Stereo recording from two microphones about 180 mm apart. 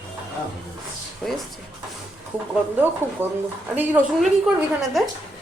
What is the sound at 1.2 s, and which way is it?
Speech, 5° left (ahead or behind).